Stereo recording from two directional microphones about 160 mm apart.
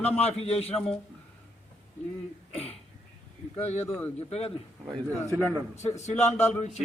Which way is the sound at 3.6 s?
45° left (ahead or behind).